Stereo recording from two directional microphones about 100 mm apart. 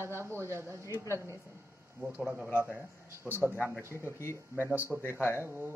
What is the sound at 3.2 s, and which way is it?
Speech, 20° right (ahead or behind).